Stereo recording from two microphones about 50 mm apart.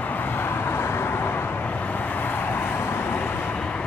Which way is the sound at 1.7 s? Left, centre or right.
Left.